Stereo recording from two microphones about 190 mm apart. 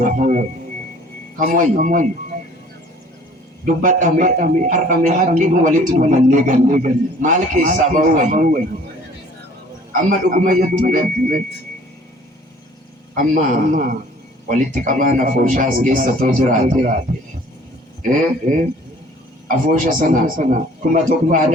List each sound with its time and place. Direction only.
0.0 s music: 40° right (ahead or behind)
1.4 s a man's voice: 45° right (ahead or behind)
3.7 s a man's voice: 45° right (ahead or behind)
10.1 s a man's voice: 45° right (ahead or behind)
13.1 s a man's voice: 45° right (ahead or behind)